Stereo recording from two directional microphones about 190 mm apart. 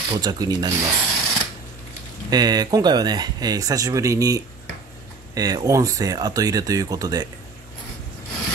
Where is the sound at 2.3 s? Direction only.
20° right (ahead or behind).